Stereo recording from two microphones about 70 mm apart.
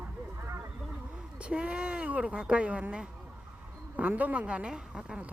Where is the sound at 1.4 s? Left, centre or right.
Centre.